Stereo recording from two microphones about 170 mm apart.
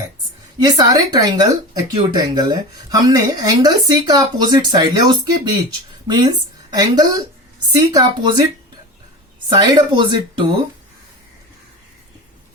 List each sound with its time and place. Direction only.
0.6 s a woman's voice: 25° right (ahead or behind)
9.6 s speech: 25° right (ahead or behind)